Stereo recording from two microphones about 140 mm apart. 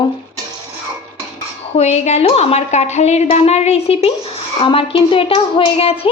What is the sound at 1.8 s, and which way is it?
A woman's voice, 50° left (ahead or behind).